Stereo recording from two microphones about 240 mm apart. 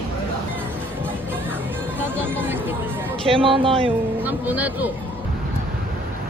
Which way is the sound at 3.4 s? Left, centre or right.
Right.